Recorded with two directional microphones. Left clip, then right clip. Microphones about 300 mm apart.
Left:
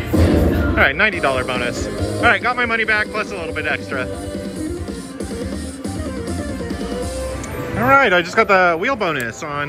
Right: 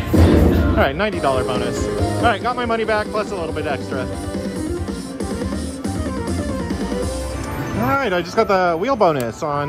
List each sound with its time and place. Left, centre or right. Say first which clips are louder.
0.1 s music: right 1 dB; centre
0.7 s speech: left 3 dB; centre
2.0 s music: right 2 dB; centre
2.2 s speech: left 4 dB; centre
7.8 s speech: left 7 dB; centre